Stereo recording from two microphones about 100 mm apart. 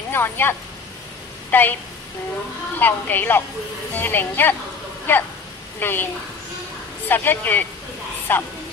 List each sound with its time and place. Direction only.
0.1 s a woman's voice: 20° left (ahead or behind)
2.8 s a woman's voice: 20° left (ahead or behind)
7.1 s a woman's voice: 20° left (ahead or behind)